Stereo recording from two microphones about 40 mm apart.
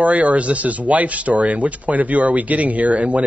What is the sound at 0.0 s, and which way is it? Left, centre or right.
Speech, right.